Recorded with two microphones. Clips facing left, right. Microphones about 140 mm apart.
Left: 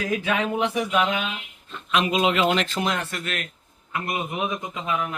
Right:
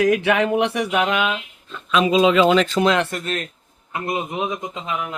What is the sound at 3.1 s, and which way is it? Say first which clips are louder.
Speech: right 5 dB; 40° right (ahead or behind).